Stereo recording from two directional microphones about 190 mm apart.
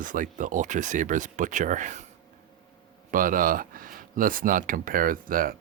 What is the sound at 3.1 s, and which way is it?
Speech, 45° right (ahead or behind).